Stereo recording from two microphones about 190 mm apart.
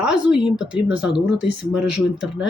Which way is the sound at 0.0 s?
5° right (ahead or behind).